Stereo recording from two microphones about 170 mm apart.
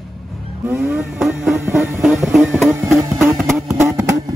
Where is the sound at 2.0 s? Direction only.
Centre (ahead or behind).